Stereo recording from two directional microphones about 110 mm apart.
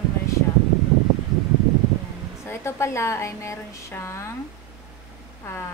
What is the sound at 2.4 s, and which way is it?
Speech, 25° left (ahead or behind).